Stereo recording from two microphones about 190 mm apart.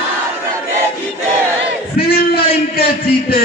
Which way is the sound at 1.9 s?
55° left (ahead or behind).